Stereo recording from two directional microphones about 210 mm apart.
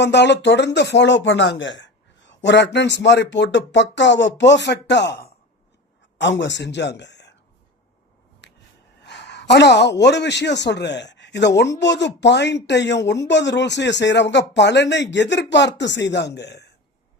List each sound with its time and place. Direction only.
0.0 s a man's voice: 55° left (ahead or behind)
9.0 s a sound: 55° left (ahead or behind)
10.0 s speech: 55° left (ahead or behind)